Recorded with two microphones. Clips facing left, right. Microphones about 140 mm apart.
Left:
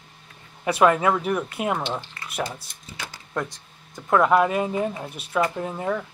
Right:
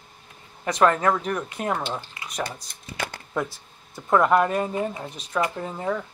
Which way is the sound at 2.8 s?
60° right (ahead or behind).